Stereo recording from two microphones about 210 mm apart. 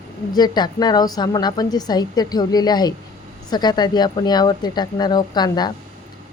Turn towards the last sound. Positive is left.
turn(degrees=20)  # may be behind; listen again after turning